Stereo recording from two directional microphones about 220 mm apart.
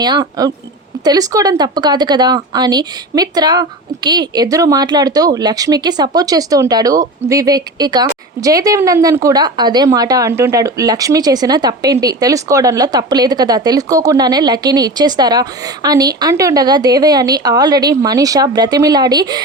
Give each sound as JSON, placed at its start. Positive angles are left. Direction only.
{"t": 0.0, "sound": "speech", "side_deg": -20}